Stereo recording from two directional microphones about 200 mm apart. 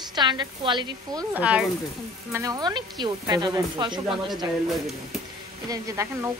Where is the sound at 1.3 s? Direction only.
5° right (ahead or behind); by 4.0 s 20° right (ahead or behind).